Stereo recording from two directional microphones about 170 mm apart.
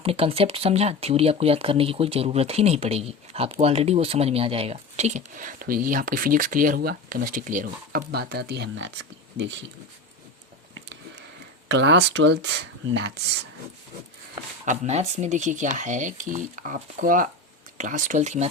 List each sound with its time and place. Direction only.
0.0 s speech: 35° right (ahead or behind); by 8.9 s 80° right
9.4 s speech: 90° right
11.7 s speech: 90° right
14.6 s speech: 45° right (ahead or behind)